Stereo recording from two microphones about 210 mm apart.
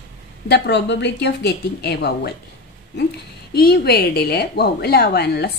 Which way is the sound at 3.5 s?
50° left (ahead or behind).